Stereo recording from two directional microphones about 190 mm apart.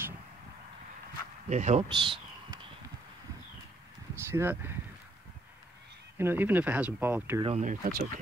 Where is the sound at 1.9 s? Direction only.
25° right (ahead or behind).